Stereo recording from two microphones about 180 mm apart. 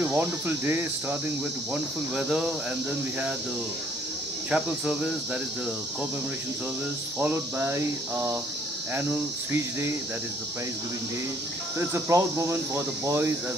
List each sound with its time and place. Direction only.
0.0 s speech: 10° right (ahead or behind)
1.7 s cricket: 5° right (ahead or behind)
4.5 s cricket: 5° right (ahead or behind)
7.2 s speech: 10° right (ahead or behind)
11.9 s speech: 20° right (ahead or behind)